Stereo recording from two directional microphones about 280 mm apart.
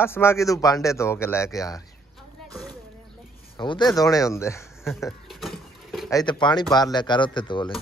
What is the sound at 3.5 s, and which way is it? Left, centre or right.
Speech, centre.